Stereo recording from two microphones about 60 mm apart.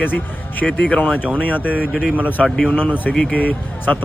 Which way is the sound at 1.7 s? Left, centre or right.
Right.